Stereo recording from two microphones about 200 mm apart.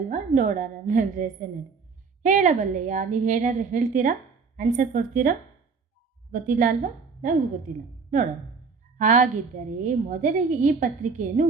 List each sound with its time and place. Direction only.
0.1 s a woman's voice: 40° right (ahead or behind)